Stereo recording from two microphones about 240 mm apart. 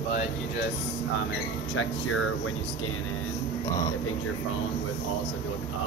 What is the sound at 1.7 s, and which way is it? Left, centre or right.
Speech, left.